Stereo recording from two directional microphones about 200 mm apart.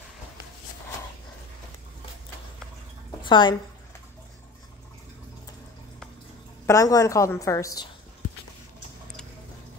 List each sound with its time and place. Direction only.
3.2 s speech: 25° left (ahead or behind)
6.6 s a woman's voice: 15° left (ahead or behind)